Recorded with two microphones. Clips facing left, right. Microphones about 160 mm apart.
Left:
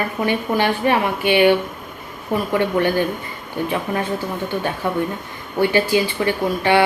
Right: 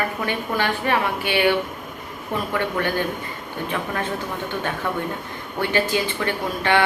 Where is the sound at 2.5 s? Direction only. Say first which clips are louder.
Left 6 dB; 15° left (ahead or behind).